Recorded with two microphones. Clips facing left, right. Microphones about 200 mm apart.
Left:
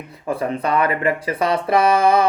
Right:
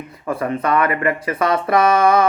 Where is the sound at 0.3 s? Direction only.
30° left (ahead or behind).